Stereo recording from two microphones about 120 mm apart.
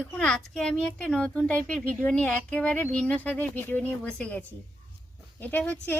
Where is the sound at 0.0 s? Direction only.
5° left (ahead or behind).